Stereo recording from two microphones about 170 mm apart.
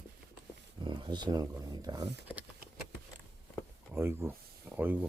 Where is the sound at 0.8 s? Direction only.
25° right (ahead or behind).